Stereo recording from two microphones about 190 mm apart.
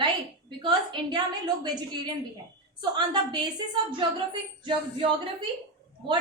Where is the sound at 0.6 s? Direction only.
25° right (ahead or behind).